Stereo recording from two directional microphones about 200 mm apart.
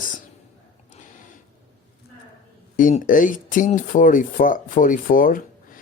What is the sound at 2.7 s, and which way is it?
Speech, 40° left (ahead or behind).